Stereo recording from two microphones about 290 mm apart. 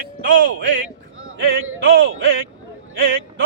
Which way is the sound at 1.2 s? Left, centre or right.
Right.